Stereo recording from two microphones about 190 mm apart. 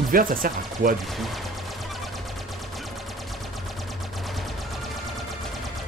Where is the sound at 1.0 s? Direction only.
Centre (ahead or behind).